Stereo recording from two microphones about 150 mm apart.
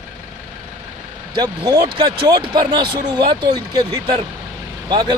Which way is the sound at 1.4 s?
25° right (ahead or behind).